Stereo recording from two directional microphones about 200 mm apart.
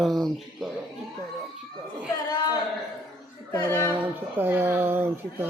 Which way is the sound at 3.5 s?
15° left (ahead or behind).